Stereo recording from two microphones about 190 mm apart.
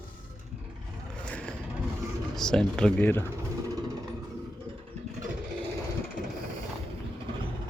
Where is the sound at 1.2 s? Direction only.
5° left (ahead or behind).